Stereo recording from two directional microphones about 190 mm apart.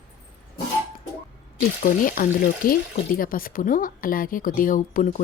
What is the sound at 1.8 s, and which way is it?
Speech, 50° left (ahead or behind).